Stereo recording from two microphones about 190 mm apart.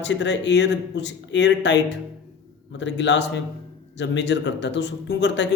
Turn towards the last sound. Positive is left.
turn(degrees=65)  # may be behind; listen again after turning